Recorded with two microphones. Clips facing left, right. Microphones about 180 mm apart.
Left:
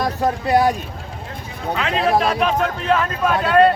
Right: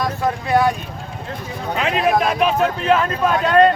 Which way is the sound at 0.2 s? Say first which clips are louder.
Left 1 dB; 35° left (ahead or behind).